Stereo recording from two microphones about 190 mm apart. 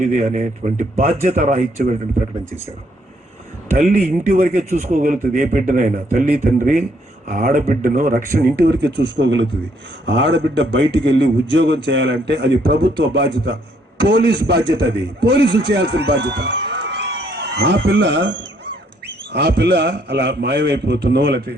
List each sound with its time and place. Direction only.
0.0 s a man's voice: 40° right (ahead or behind)
3.7 s speech: 40° right (ahead or behind)
8.6 s a man's voice: 60° right (ahead or behind)